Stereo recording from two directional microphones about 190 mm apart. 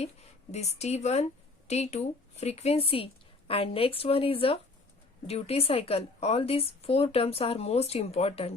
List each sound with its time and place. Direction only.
0.0 s a woman's voice: 35° left (ahead or behind)